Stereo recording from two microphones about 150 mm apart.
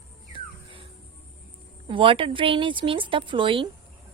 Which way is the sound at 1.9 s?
35° right (ahead or behind).